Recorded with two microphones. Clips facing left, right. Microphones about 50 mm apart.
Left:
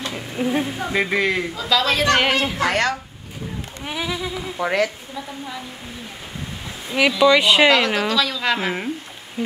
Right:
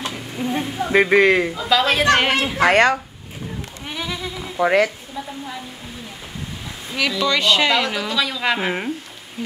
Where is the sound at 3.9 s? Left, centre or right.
Centre.